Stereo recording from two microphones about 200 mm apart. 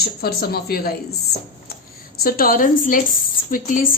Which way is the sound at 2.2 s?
45° left (ahead or behind).